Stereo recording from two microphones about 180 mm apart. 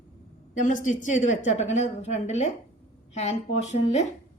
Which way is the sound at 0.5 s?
45° left (ahead or behind).